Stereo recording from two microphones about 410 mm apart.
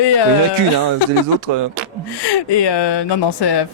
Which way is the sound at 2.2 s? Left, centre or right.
Left.